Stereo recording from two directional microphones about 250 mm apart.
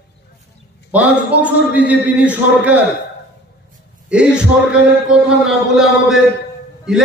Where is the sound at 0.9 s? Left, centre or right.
Centre.